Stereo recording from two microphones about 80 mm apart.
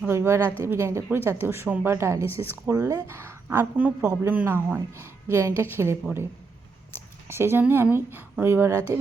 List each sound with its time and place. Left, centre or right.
0.1 s a woman's voice: right
3.8 s a man's voice: centre
7.3 s a woman's voice: right